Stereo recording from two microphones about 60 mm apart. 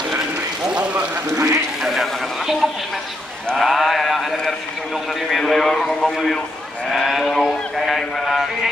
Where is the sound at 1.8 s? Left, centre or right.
Centre.